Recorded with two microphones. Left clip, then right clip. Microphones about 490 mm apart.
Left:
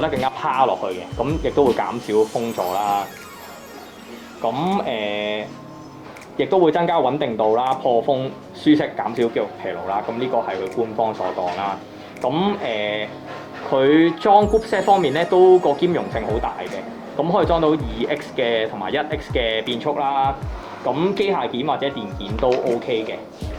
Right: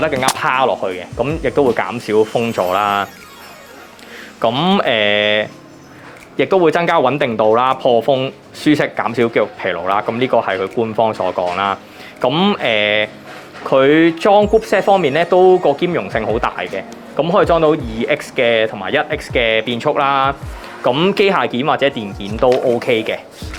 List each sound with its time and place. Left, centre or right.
0.0 s speech: right
4.4 s speech: right
12.2 s speech: right